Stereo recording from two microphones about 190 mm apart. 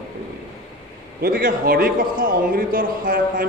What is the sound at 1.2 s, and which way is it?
A man's voice, 50° right (ahead or behind).